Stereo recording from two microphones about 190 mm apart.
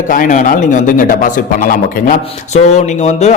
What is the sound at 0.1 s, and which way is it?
A man's voice, 45° left (ahead or behind).